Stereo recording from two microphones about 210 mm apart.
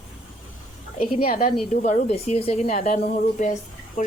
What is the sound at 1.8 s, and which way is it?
Speech, 35° left (ahead or behind).